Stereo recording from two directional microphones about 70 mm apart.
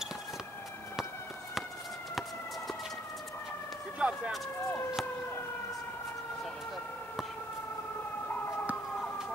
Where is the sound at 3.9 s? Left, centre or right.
Centre.